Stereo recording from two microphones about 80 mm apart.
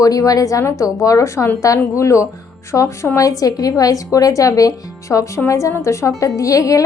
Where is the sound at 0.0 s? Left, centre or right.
Left.